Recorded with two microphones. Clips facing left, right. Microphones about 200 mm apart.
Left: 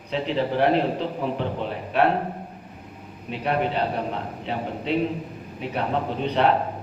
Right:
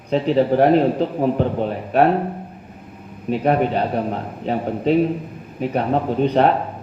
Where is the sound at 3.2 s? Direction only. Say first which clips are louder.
Right 7 dB; 45° right (ahead or behind).